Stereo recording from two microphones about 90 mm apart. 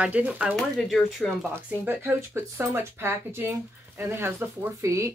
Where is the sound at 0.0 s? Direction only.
15° right (ahead or behind).